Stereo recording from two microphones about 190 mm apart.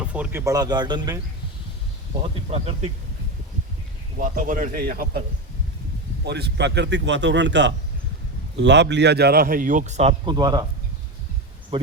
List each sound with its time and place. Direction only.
0.0 s speech: 5° right (ahead or behind)
2.3 s speech: 30° right (ahead or behind)
4.2 s a man's voice: 45° right (ahead or behind)
6.2 s a man's voice: 60° right (ahead or behind); by 10.7 s 20° right (ahead or behind)
11.7 s speech: 25° right (ahead or behind)